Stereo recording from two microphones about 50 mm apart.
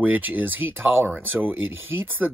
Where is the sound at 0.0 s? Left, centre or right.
Right.